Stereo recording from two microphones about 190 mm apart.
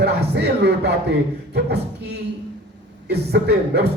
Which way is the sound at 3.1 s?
60° right (ahead or behind).